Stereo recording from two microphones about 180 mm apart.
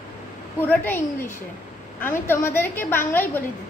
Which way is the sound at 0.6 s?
10° left (ahead or behind).